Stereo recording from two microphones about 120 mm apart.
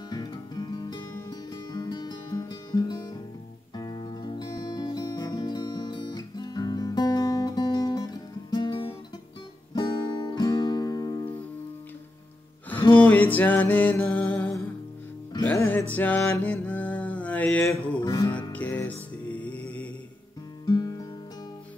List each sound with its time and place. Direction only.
0.1 s music: 35° left (ahead or behind)
13.0 s music: 15° left (ahead or behind)
15.9 s mantra: 15° left (ahead or behind)
18.0 s music: 30° left (ahead or behind)
18.3 s music: 15° left (ahead or behind)
20.6 s music: 35° left (ahead or behind)